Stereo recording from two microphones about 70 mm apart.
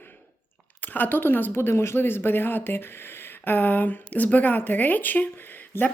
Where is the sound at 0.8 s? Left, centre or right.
Left.